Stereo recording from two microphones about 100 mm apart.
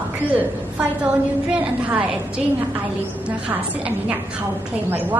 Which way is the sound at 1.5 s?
10° right (ahead or behind).